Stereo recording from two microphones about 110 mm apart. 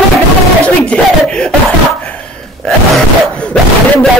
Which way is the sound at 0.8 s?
10° left (ahead or behind).